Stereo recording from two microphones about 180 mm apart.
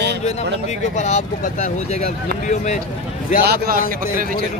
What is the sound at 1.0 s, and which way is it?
Speech, 40° left (ahead or behind).